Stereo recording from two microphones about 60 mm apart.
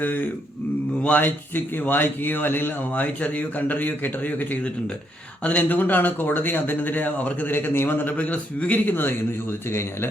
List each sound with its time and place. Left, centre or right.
0.0 s a man's voice: left